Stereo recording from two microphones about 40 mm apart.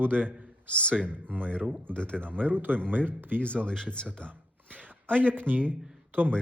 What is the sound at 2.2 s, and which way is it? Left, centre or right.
Speech, right.